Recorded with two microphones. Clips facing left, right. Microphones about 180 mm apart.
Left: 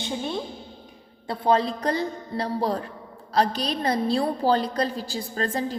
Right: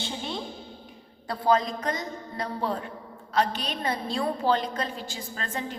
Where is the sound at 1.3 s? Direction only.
30° left (ahead or behind).